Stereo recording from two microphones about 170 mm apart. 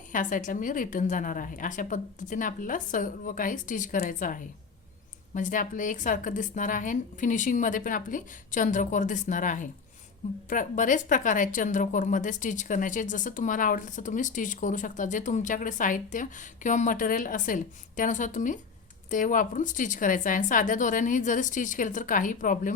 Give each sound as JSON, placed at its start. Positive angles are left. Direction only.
{"t": 0.1, "sound": "a woman's voice", "side_deg": 50}